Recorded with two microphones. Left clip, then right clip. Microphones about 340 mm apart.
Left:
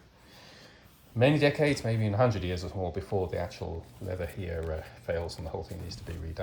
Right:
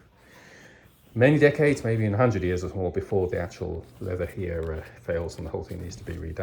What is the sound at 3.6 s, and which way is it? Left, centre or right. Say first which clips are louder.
Speech: right 6 dB; right.